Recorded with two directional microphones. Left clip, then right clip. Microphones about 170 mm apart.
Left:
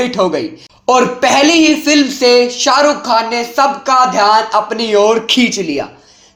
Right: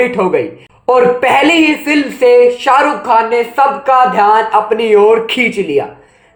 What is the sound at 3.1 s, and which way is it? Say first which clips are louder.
Speech: right 3 dB; 45° left (ahead or behind).